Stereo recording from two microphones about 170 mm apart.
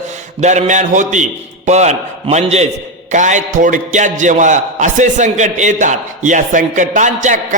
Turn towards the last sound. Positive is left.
turn(degrees=-50)  # may be behind; listen again after turning